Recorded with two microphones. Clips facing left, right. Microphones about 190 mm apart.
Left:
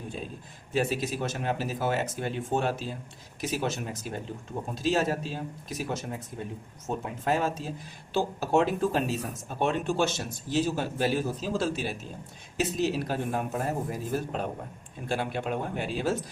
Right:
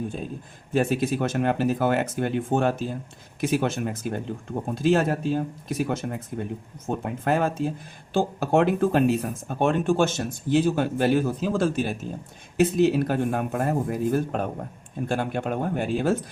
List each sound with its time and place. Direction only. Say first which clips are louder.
0.7 s speech: right 5 dB; 55° right (ahead or behind)